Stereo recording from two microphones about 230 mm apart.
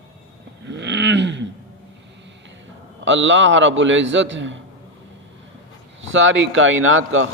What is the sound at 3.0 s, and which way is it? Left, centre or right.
Speech, right.